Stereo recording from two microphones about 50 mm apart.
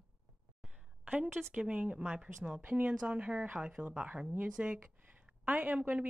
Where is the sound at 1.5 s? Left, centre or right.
Right.